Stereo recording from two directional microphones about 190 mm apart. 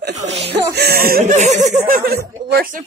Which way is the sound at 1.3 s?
40° right (ahead or behind).